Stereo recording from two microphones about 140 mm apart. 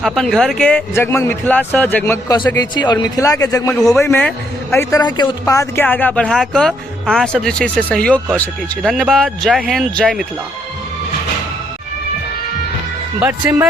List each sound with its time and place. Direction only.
0.0 s speech: centre (ahead or behind)
0.9 s speech: 15° left (ahead or behind)
2.6 s a man's voice: 30° left (ahead or behind)
4.0 s speech: 15° left (ahead or behind)
4.9 s speech: 30° left (ahead or behind)
5.5 s speech: 20° left (ahead or behind); by 10.2 s 5° left (ahead or behind)
13.1 s speech: 15° right (ahead or behind)